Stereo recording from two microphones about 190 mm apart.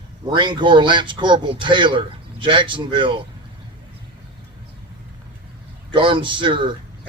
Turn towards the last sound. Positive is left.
turn(degrees=-25)  # may be behind; listen again after turning